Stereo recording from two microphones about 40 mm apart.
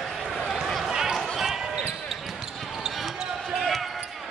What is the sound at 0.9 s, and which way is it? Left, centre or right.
Chatter, centre.